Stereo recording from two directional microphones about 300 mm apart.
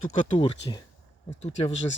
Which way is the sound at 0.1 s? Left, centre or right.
Centre.